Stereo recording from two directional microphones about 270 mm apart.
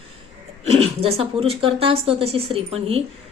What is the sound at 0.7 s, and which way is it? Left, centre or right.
A woman's voice, right.